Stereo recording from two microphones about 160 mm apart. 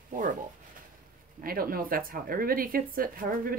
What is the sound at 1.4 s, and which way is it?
Speech, 65° right (ahead or behind).